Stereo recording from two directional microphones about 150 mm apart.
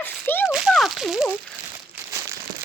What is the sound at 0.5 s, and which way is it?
Speech, centre (ahead or behind).